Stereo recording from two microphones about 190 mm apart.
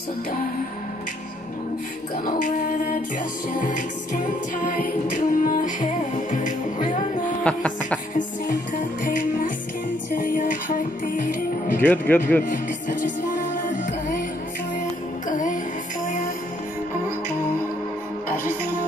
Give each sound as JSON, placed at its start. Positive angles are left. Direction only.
{"t": 4.6, "sound": "music", "side_deg": 45}
{"t": 7.4, "sound": "a sound", "side_deg": 5}
{"t": 9.0, "sound": "music", "side_deg": 45}
{"t": 11.8, "sound": "speech", "side_deg": 10}
{"t": 12.4, "sound": "music", "side_deg": 45}
{"t": 15.2, "sound": "music", "side_deg": 40}